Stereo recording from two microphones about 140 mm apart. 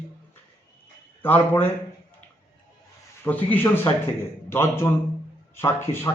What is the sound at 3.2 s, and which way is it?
A man's voice, 15° left (ahead or behind).